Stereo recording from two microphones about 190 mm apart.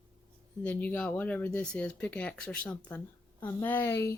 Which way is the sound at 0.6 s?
10° left (ahead or behind).